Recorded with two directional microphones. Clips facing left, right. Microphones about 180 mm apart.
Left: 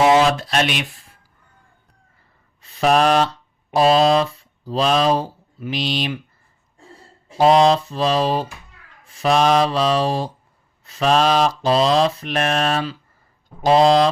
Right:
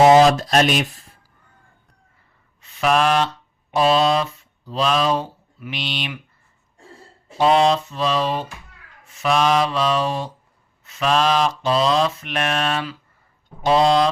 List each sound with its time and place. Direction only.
0.0 s speech: 40° right (ahead or behind)
2.6 s speech: 35° left (ahead or behind)
7.3 s mantra: 40° left (ahead or behind)